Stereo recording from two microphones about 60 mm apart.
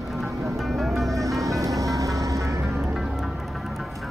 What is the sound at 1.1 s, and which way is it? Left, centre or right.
Music, right.